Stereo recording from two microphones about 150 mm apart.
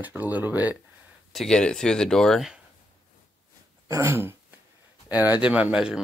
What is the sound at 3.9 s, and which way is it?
Speech, 20° right (ahead or behind).